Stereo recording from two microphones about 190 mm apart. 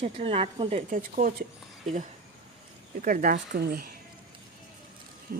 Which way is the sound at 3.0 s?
45° right (ahead or behind).